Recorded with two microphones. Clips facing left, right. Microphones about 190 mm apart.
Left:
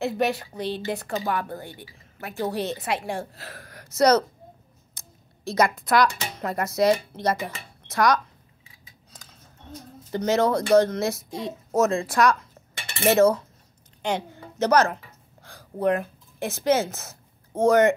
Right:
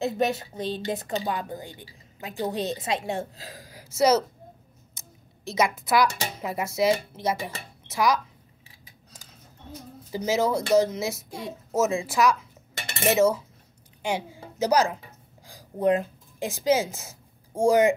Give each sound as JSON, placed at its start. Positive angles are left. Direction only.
{"t": 0.0, "sound": "a woman's voice", "side_deg": -20}
{"t": 3.6, "sound": "speech", "side_deg": -5}
{"t": 5.5, "sound": "speech", "side_deg": -5}
{"t": 10.1, "sound": "speech", "side_deg": -5}
{"t": 12.7, "sound": "cutlery", "side_deg": -45}
{"t": 13.1, "sound": "a woman's voice", "side_deg": -5}